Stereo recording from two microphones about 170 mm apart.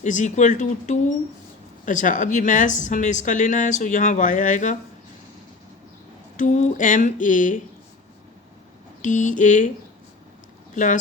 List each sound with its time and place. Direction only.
0.0 s speech: 45° left (ahead or behind)
6.3 s speech: 45° left (ahead or behind)
9.0 s speech: 45° left (ahead or behind)